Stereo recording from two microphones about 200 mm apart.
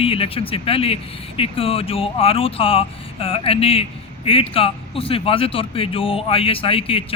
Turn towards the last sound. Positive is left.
turn(degrees=30)  # may be behind; listen again after turning